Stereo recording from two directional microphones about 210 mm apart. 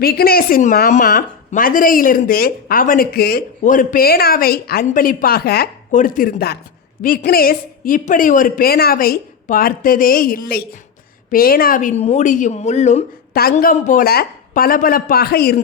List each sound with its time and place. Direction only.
0.0 s a woman's voice: 45° left (ahead or behind)